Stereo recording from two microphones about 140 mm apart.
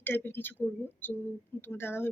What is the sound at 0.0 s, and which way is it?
Speech, 15° left (ahead or behind).